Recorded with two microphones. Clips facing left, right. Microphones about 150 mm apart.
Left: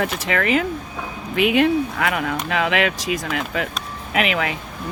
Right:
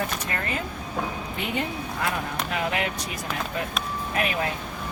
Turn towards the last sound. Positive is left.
turn(degrees=90)